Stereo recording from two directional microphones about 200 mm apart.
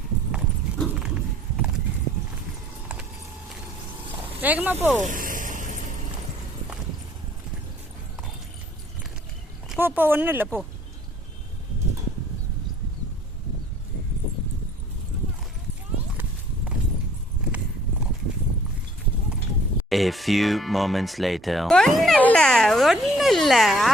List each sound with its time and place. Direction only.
0.8 s dog: 5° right (ahead or behind)
4.4 s speech: 10° right (ahead or behind)
5.0 s vehicle: 45° right (ahead or behind)
9.6 s speech: 10° right (ahead or behind)
19.9 s speech: centre (ahead or behind)